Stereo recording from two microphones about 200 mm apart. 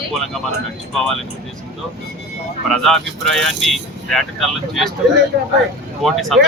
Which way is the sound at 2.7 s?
Centre (ahead or behind).